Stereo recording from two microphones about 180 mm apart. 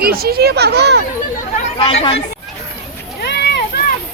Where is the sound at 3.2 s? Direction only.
70° left (ahead or behind).